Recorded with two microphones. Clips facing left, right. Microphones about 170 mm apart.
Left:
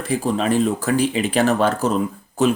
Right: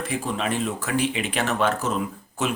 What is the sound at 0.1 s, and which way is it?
Speech, 35° left (ahead or behind).